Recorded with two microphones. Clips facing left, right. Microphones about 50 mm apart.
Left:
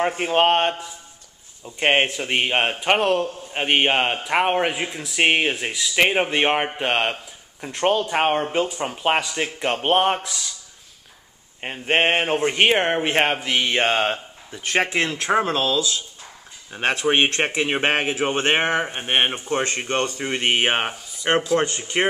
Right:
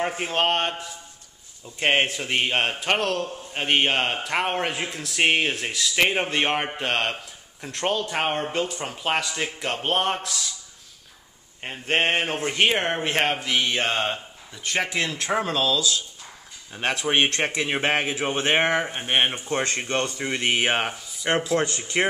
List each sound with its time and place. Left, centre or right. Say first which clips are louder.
0.2 s a man's voice: left 6 dB; centre
11.6 s speech: left 3 dB; left
18.3 s speech: even; left
18.9 s a man's voice: left 2 dB; centre